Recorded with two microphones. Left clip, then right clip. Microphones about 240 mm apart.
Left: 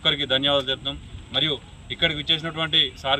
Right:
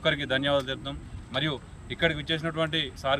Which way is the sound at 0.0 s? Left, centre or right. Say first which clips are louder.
Left 5 dB; centre.